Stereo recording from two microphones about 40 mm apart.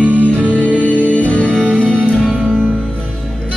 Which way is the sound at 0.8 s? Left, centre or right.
Left.